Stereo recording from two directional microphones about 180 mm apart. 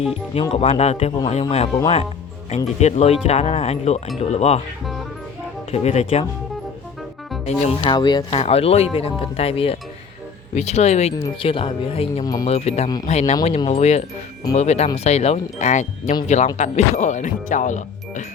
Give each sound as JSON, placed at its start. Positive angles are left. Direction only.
{"t": 0.3, "sound": "speech", "side_deg": 35}
{"t": 2.8, "sound": "speech", "side_deg": 35}
{"t": 5.7, "sound": "speech", "side_deg": 35}
{"t": 7.6, "sound": "speech", "side_deg": 35}
{"t": 7.9, "sound": "speech", "side_deg": 25}
{"t": 8.4, "sound": "speech", "side_deg": 35}
{"t": 12.2, "sound": "speech", "side_deg": 20}
{"t": 12.5, "sound": "speech", "side_deg": 35}